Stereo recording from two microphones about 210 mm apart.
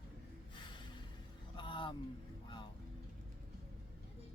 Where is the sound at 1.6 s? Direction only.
25° left (ahead or behind).